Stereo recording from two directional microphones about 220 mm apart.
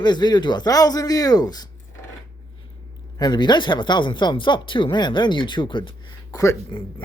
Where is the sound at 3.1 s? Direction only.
20° left (ahead or behind).